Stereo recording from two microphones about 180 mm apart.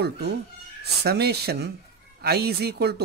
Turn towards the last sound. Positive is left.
turn(degrees=-65)  # may be behind; listen again after turning